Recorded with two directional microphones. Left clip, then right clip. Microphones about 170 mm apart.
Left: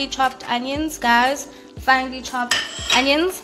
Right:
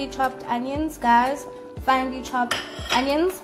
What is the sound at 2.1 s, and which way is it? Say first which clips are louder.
Dishes: even; 20° right (ahead or behind).